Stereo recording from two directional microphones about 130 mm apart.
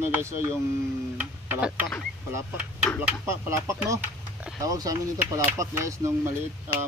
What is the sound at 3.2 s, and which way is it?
Speech, 20° right (ahead or behind).